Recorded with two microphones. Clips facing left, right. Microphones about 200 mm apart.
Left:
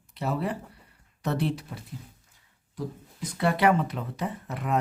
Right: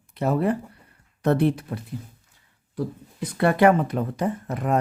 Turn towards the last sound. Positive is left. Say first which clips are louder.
# right 6 dB
turn(degrees=-45)  # may be behind; listen again after turning